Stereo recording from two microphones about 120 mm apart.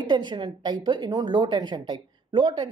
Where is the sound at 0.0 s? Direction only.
35° right (ahead or behind).